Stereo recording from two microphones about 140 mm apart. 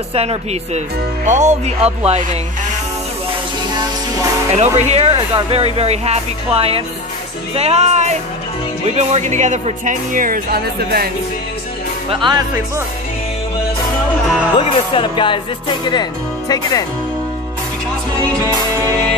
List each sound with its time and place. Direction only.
0.1 s speech: 45° right (ahead or behind)
4.6 s speech: 50° right (ahead or behind); by 11.1 s 90° right
12.1 s speech: 35° right (ahead or behind)
14.6 s speech: 35° left (ahead or behind)